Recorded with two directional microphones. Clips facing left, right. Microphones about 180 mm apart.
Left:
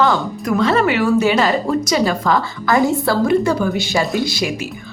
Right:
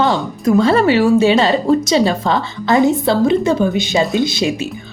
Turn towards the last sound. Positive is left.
turn(degrees=-25)  # may be behind; listen again after turning